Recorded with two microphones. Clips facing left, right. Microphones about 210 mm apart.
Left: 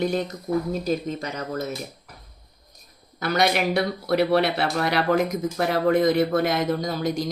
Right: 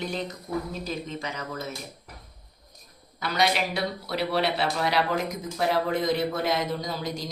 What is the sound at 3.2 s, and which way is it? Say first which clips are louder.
Speech: left 4 dB; 50° left (ahead or behind).